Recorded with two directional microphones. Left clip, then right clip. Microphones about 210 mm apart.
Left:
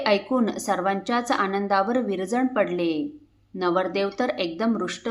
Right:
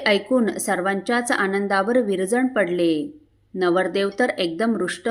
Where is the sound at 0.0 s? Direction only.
15° right (ahead or behind).